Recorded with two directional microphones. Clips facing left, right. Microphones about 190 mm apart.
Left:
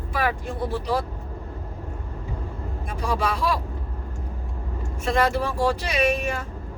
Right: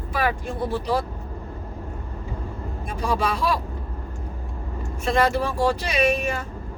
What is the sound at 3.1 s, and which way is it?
Speech, 25° right (ahead or behind).